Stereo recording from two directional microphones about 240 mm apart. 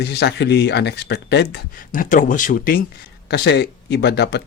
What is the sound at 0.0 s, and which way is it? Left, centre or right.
Speech, left.